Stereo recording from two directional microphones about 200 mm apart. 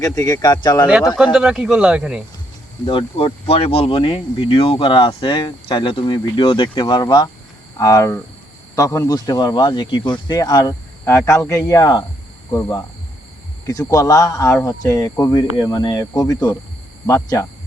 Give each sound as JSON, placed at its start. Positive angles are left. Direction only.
{"t": 0.0, "sound": "speech", "side_deg": 20}
{"t": 1.1, "sound": "speech", "side_deg": -5}
{"t": 2.8, "sound": "speech", "side_deg": 25}